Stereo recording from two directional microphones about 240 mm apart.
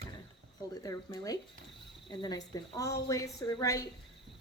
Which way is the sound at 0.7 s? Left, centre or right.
Centre.